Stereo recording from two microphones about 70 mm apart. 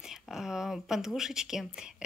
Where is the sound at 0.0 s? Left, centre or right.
Centre.